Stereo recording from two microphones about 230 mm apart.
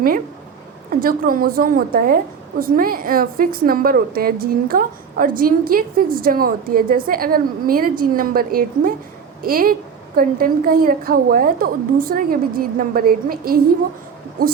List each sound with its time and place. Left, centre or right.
0.9 s a woman's voice: right